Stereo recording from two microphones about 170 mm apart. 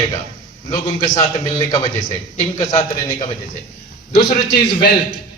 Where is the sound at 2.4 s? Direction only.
20° left (ahead or behind).